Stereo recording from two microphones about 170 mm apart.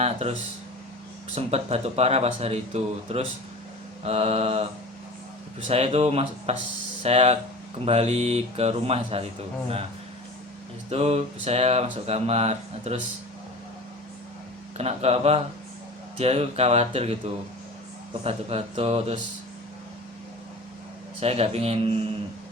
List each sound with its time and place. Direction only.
0.0 s speech: 35° right (ahead or behind)
1.4 s speech: 40° right (ahead or behind)
10.8 s speech: 35° right (ahead or behind)
14.8 s speech: 40° right (ahead or behind)
21.2 s speech: 35° right (ahead or behind)